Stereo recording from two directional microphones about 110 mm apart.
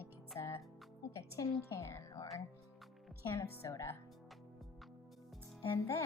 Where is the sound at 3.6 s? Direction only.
25° left (ahead or behind).